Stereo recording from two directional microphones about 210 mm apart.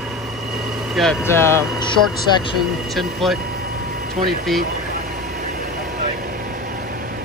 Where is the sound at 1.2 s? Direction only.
10° left (ahead or behind).